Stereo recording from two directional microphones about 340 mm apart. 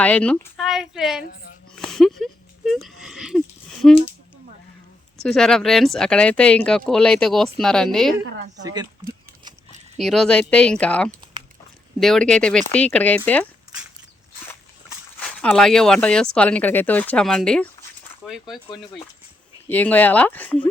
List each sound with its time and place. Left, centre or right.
0.0 s speech: centre
1.7 s a sound: centre
5.2 s speech: centre
8.2 s a woman's voice: right
8.6 s a sound: centre
10.0 s speech: centre
15.2 s speech: centre
18.5 s speech: centre